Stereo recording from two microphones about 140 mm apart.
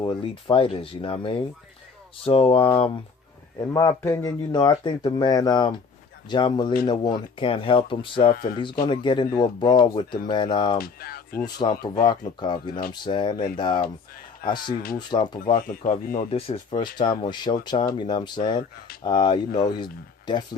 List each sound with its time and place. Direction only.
0.0 s speech: 35° left (ahead or behind)
3.6 s speech: 25° left (ahead or behind)
10.8 s speech: 90° left
11.4 s speech: 30° left (ahead or behind)
14.9 s speech: 30° left (ahead or behind)
15.5 s speech: 70° left (ahead or behind)
16.7 s speech: 30° left (ahead or behind)